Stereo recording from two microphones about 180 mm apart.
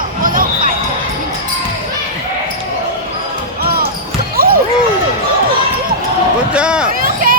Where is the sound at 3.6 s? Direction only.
60° right (ahead or behind).